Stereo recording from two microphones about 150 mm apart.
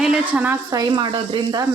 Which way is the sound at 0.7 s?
25° right (ahead or behind).